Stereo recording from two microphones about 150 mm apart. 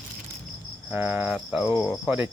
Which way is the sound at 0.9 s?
10° right (ahead or behind).